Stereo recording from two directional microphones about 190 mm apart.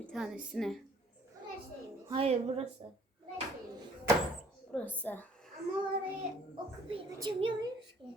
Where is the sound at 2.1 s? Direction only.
30° right (ahead or behind).